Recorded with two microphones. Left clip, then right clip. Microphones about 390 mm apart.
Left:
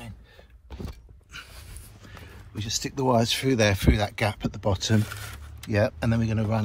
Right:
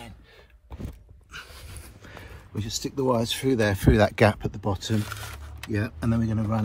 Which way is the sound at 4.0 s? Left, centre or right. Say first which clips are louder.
Right 7 dB; centre.